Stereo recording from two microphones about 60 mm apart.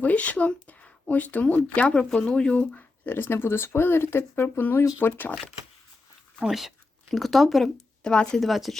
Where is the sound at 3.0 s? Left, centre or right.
Left.